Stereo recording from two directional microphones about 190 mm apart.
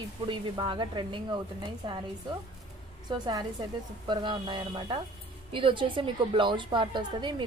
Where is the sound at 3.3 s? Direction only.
20° right (ahead or behind).